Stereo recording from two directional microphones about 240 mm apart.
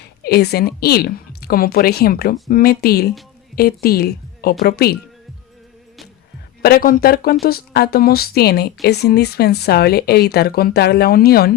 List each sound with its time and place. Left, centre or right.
0.0 s a woman's voice: left
6.6 s a woman's voice: left